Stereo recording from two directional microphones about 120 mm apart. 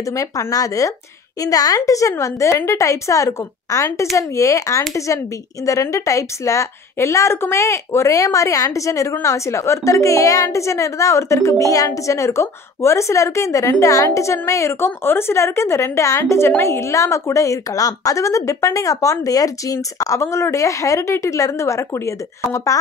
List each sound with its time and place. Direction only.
0.0 s a woman's voice: 25° left (ahead or behind)